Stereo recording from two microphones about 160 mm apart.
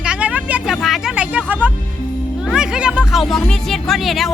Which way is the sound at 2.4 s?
5° right (ahead or behind).